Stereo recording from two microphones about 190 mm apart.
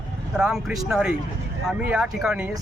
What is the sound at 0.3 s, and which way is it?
Speech, 5° right (ahead or behind).